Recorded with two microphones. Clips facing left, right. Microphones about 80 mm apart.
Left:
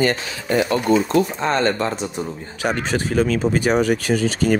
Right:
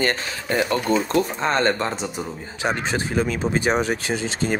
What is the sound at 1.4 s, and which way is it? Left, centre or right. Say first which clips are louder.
Speech: left 1 dB; right.